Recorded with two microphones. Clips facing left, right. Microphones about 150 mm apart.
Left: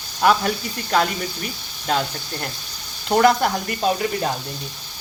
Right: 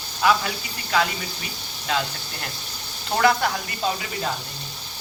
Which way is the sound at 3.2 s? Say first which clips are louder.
Left 2 dB; 45° left (ahead or behind).